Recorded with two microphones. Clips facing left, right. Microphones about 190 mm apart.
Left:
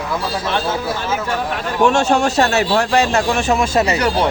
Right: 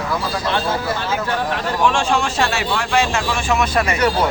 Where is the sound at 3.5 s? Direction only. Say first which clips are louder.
Left 1 dB; 25° left (ahead or behind).